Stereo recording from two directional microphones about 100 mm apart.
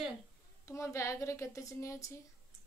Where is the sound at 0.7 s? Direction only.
30° left (ahead or behind).